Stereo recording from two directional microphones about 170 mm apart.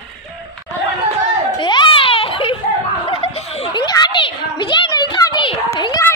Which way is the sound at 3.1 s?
35° left (ahead or behind).